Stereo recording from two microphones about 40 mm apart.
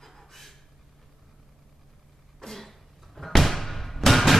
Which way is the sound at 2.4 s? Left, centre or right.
Centre.